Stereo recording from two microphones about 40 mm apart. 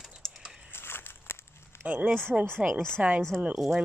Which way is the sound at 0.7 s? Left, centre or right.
Left.